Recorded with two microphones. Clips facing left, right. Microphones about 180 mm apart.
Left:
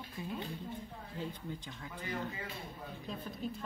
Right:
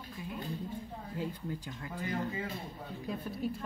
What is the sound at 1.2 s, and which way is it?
Speech, 5° right (ahead or behind).